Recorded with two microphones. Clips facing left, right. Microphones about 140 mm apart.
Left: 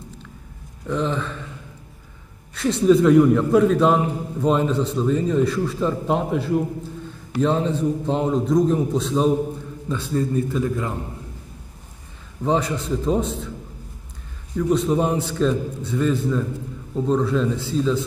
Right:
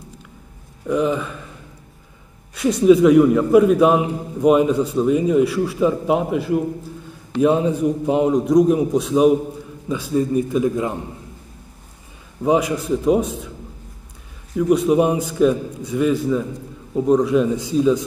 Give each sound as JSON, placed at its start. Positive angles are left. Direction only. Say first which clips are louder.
{"t": 0.8, "sound": "a man's voice", "louder": "right 4 dB", "side_deg": -10}
{"t": 2.5, "sound": "a man's voice", "louder": "right 3 dB", "side_deg": -10}
{"t": 12.4, "sound": "a man's voice", "louder": "right 4 dB", "side_deg": -10}
{"t": 14.5, "sound": "a man's voice", "louder": "right 4 dB", "side_deg": -10}